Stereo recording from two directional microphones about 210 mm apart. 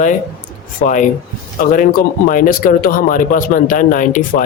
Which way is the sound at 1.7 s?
40° left (ahead or behind).